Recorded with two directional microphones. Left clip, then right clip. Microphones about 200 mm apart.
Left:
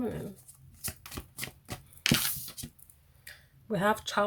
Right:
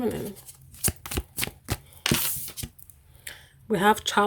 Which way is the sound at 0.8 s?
55° right (ahead or behind).